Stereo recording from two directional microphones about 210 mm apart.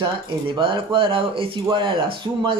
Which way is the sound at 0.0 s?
20° right (ahead or behind).